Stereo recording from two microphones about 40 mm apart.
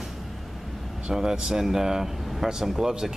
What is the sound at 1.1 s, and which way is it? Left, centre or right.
Speech, centre.